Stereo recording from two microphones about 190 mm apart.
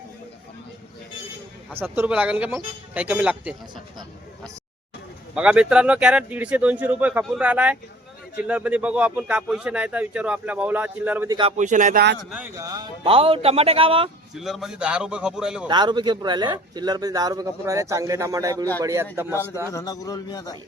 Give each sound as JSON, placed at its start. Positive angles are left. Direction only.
{"t": 1.7, "sound": "speech", "side_deg": -10}
{"t": 5.3, "sound": "speech", "side_deg": -5}
{"t": 11.5, "sound": "speech", "side_deg": -40}
{"t": 12.3, "sound": "speech", "side_deg": -10}
{"t": 12.6, "sound": "a man's voice", "side_deg": -25}
{"t": 14.3, "sound": "speech", "side_deg": 0}
{"t": 15.6, "sound": "a man's voice", "side_deg": -25}
{"t": 19.7, "sound": "a man's voice", "side_deg": 20}